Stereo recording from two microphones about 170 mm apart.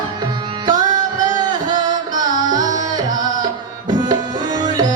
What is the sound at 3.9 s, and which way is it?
Tabla, 25° right (ahead or behind).